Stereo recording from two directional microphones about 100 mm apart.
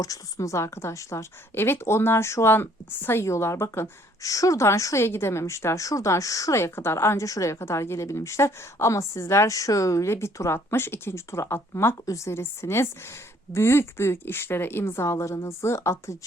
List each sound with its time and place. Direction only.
0.0 s a woman's voice: 35° left (ahead or behind)